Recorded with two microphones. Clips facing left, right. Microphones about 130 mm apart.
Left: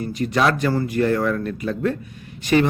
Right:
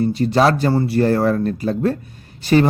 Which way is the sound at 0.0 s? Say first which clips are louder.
Right 5 dB; 30° right (ahead or behind).